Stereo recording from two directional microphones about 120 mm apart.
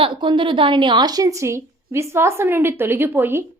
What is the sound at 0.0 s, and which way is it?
A woman's voice, 45° right (ahead or behind).